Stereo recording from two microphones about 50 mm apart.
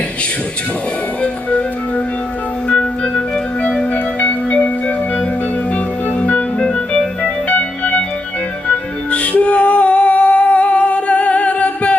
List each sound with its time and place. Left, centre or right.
1.2 s music: left
2.6 s music: left
3.9 s music: left
5.7 s organ: left
7.4 s music: left